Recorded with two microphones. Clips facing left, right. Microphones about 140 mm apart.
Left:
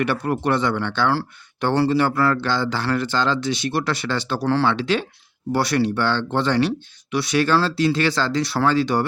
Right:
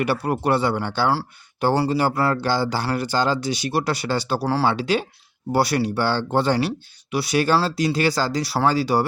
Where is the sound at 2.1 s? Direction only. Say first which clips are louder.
Left 2 dB; 30° right (ahead or behind).